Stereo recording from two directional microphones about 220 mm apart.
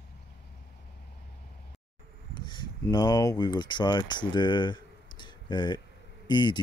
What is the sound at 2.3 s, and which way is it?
Speech, 20° left (ahead or behind).